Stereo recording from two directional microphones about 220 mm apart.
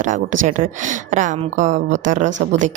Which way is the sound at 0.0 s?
35° right (ahead or behind).